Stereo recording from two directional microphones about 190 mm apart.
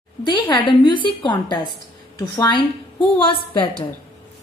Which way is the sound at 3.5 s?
25° left (ahead or behind).